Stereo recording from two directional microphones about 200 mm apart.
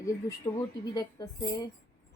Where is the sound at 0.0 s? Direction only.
15° left (ahead or behind).